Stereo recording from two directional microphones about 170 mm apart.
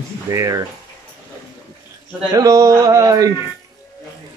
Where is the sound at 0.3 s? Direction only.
20° right (ahead or behind).